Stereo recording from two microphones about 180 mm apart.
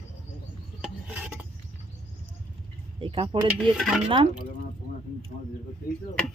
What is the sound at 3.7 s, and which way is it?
Speech, centre (ahead or behind).